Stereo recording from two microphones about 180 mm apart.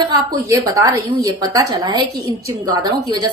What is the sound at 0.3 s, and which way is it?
A woman's voice, 20° right (ahead or behind).